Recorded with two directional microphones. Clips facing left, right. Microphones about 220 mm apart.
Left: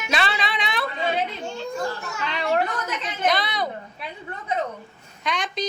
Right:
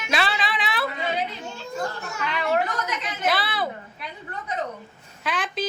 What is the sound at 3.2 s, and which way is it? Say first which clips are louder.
Speech: left 1 dB; 5° right (ahead or behind).